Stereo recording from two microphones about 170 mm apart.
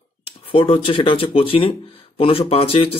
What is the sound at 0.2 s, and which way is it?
Speech, 35° left (ahead or behind).